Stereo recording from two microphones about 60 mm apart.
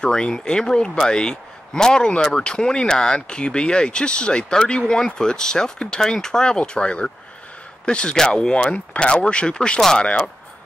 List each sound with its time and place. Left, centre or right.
0.0 s speech: centre